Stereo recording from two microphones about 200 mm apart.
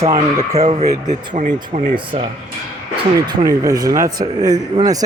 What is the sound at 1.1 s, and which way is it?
Speech, 35° right (ahead or behind).